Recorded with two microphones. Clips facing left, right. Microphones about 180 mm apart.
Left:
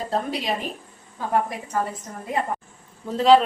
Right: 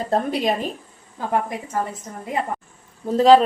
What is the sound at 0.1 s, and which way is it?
Speech, 50° right (ahead or behind).